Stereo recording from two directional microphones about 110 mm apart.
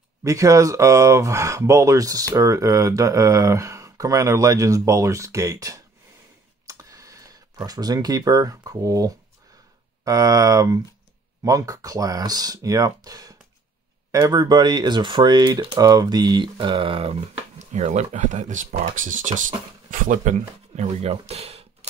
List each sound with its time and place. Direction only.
0.2 s speech: 30° right (ahead or behind); by 19.3 s 85° right
20.7 s speech: 80° right